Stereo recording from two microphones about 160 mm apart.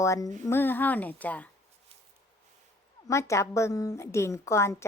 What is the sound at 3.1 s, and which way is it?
A woman's voice, 20° left (ahead or behind).